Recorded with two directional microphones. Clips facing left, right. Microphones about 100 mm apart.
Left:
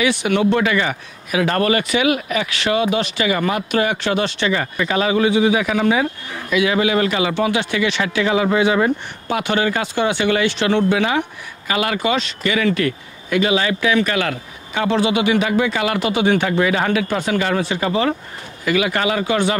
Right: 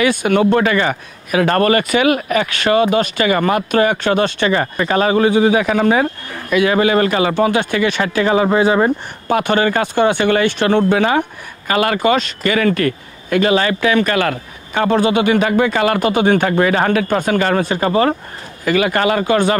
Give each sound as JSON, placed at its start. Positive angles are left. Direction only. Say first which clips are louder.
{"t": 0.0, "sound": "speech", "louder": "right 3 dB", "side_deg": -45}
{"t": 9.3, "sound": "speech", "louder": "right 4 dB", "side_deg": -50}